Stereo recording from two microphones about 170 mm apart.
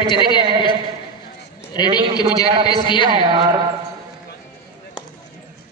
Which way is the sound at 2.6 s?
25° left (ahead or behind).